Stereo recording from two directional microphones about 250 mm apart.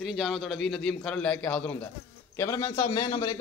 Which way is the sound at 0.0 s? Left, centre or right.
Centre.